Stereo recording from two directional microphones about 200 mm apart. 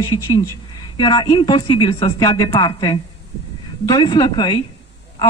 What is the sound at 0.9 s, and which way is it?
Speech, 20° left (ahead or behind).